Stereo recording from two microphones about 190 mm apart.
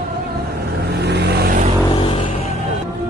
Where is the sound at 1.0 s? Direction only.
60° right (ahead or behind).